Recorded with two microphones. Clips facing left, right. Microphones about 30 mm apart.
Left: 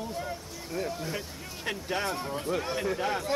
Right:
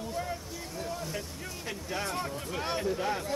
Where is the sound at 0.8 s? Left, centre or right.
Left.